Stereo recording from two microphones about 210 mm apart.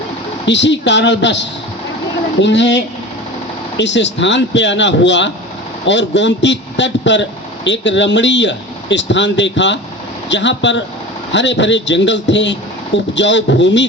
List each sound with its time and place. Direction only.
0.4 s a man's voice: 55° left (ahead or behind)